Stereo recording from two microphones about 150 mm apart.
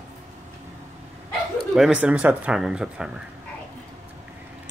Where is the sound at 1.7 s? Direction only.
5° right (ahead or behind).